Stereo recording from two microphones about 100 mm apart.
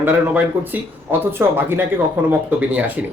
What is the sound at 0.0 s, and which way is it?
A man's voice, 20° right (ahead or behind).